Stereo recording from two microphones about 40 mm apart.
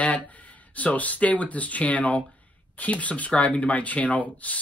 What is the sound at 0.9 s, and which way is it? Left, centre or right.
Speech, left.